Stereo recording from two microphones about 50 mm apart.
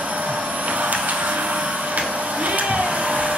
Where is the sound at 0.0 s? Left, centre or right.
Right.